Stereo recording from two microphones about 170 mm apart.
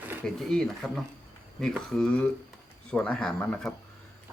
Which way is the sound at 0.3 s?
5° left (ahead or behind).